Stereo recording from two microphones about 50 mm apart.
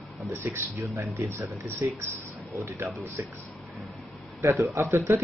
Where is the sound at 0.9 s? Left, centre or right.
Right.